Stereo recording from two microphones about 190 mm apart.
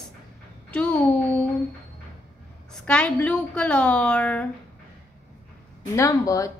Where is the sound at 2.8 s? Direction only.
5° left (ahead or behind).